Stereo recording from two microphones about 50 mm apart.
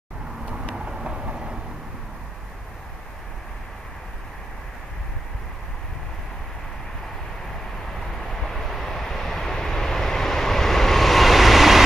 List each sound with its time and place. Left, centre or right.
0.7 s vehicle: centre
8.0 s vehicle: centre